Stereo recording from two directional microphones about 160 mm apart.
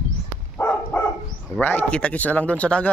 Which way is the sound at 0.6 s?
15° left (ahead or behind).